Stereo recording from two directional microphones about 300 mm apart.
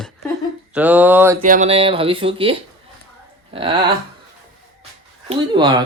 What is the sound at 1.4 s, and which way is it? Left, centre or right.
Speech, right.